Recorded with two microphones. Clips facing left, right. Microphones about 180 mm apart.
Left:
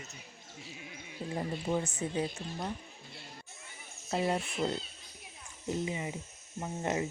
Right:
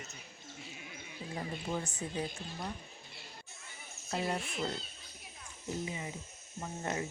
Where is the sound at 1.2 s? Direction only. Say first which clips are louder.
Left 6 dB; 45° left (ahead or behind).